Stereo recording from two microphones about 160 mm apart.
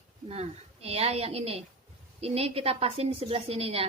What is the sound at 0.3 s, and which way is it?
Speech, 40° right (ahead or behind).